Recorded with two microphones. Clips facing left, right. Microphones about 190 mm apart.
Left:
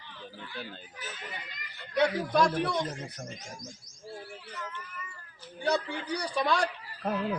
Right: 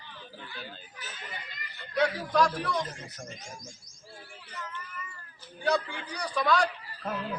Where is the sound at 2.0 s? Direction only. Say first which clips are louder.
Left 1 dB; 25° left (ahead or behind).